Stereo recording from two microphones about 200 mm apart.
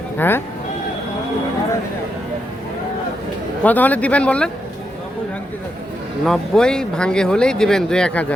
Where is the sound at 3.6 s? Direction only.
10° left (ahead or behind).